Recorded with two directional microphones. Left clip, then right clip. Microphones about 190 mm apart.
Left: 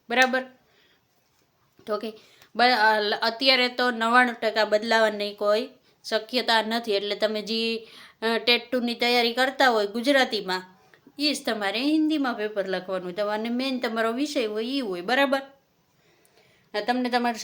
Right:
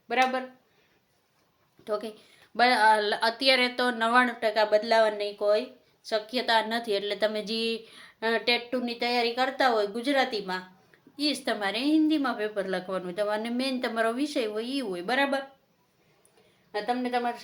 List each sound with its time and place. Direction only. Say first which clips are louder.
0.1 s speech: left 4 dB; 35° left (ahead or behind)
1.8 s speech: left 2 dB; 30° left (ahead or behind)
11.2 s speech: left 2 dB; 25° left (ahead or behind)
16.7 s a woman's voice: left 3 dB; 50° left (ahead or behind)